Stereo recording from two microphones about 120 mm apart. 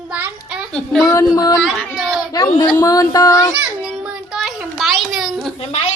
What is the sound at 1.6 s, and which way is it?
Speech, centre (ahead or behind).